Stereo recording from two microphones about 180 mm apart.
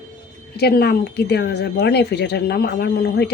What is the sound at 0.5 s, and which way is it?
Speech, 65° left (ahead or behind).